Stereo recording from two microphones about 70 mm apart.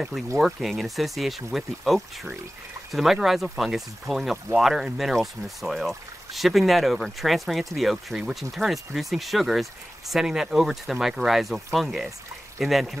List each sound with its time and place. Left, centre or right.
0.4 s speech: centre